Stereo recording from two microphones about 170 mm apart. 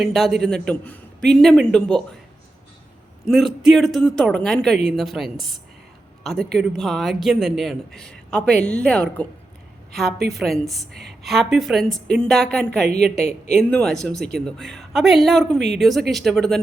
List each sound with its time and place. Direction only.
0.0 s a woman's voice: centre (ahead or behind)
3.2 s a woman's voice: centre (ahead or behind)
10.2 s a woman's voice: 75° right (ahead or behind)
10.4 s a woman's voice: centre (ahead or behind)
13.1 s speech: 40° left (ahead or behind)
13.6 s a woman's voice: 5° left (ahead or behind)